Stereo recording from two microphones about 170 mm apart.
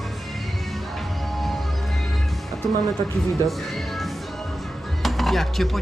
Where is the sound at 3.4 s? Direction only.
Centre (ahead or behind).